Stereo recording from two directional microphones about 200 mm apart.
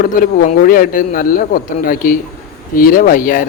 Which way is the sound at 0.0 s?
45° left (ahead or behind).